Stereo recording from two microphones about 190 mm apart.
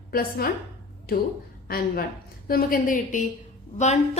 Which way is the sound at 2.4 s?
50° left (ahead or behind).